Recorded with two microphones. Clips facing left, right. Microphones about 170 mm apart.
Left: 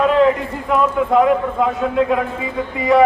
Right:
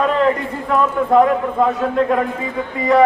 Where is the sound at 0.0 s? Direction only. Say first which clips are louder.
Left 2 dB; centre (ahead or behind).